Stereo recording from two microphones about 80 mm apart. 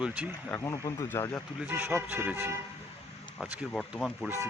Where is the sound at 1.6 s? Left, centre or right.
Right.